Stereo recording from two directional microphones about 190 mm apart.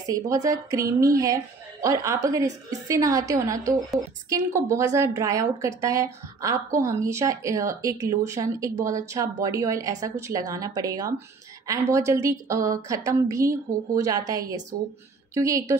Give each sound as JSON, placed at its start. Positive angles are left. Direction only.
{"t": 0.1, "sound": "a woman's voice", "side_deg": -15}